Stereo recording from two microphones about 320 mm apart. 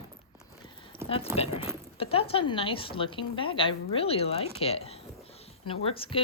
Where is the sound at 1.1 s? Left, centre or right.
Centre.